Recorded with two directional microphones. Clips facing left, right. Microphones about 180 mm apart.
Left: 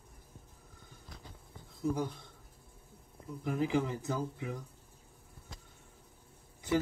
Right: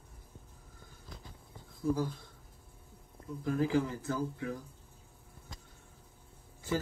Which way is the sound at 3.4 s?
20° left (ahead or behind).